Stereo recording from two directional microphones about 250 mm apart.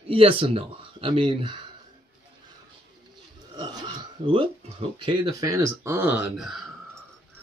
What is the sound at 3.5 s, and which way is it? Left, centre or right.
Speech, centre.